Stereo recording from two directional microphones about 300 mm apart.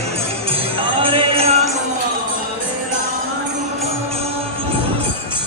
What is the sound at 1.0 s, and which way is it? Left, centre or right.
Music, centre.